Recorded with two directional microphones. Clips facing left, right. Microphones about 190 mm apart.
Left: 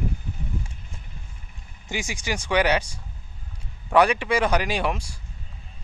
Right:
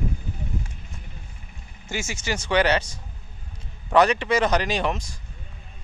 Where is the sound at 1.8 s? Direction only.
15° left (ahead or behind).